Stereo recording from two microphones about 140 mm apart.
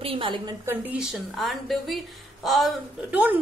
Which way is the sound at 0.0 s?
40° right (ahead or behind).